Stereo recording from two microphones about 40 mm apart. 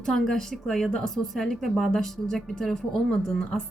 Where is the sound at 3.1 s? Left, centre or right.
Left.